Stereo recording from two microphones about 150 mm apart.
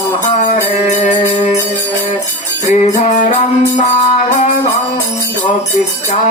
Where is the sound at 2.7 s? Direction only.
55° left (ahead or behind).